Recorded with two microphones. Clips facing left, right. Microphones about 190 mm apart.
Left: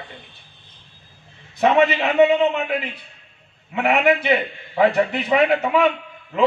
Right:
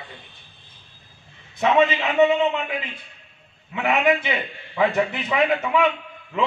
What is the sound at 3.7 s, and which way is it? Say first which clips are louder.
A man's voice: left 2 dB; 60° left (ahead or behind).